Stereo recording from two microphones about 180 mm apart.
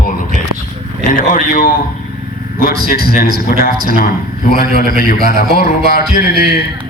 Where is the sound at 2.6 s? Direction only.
50° right (ahead or behind).